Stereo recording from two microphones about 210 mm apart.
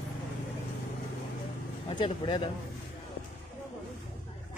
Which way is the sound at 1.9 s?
20° left (ahead or behind).